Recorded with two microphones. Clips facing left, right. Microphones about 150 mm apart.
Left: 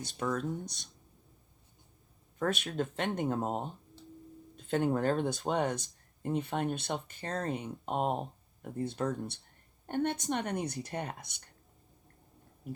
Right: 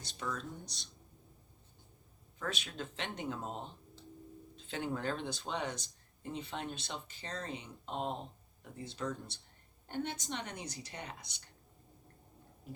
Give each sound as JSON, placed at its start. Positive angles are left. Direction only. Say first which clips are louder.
{"t": 0.0, "sound": "speech", "louder": "left 8 dB", "side_deg": 50}
{"t": 2.4, "sound": "speech", "louder": "left 9 dB", "side_deg": 50}